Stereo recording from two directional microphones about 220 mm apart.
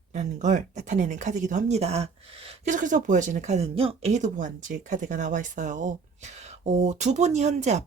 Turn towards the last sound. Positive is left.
turn(degrees=-30)  # may be behind; listen again after turning